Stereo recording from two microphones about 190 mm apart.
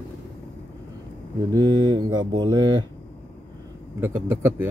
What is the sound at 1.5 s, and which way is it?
Speech, 20° right (ahead or behind).